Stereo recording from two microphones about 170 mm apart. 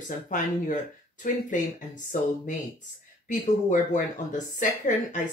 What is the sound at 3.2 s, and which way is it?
Speech, 45° left (ahead or behind).